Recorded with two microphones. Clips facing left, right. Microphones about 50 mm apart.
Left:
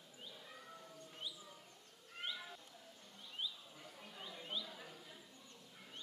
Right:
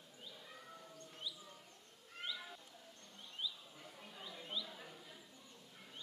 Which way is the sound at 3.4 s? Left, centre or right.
Left.